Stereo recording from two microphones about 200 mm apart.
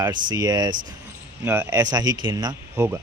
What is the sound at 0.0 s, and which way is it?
A man's voice, 20° right (ahead or behind).